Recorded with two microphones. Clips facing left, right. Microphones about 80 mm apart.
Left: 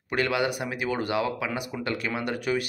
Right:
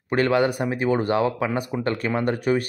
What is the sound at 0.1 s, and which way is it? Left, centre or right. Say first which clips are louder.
Speech: right 6 dB; right.